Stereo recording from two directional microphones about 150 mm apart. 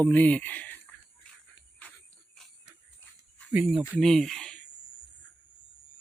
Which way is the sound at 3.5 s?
5° right (ahead or behind).